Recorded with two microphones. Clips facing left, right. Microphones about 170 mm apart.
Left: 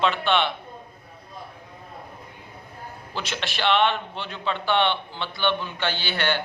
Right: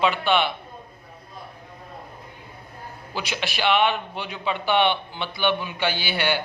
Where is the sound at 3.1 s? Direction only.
5° right (ahead or behind).